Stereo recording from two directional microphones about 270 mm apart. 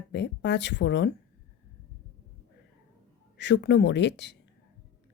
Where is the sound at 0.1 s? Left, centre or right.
Left.